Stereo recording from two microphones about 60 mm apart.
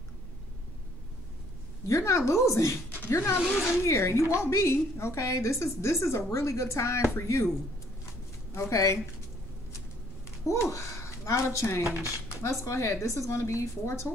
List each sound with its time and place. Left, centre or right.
1.9 s a woman's voice: left
3.1 s a woman's voice: left
3.3 s speech: centre
3.8 s a woman's voice: left
8.0 s a sound: left
10.4 s a woman's voice: left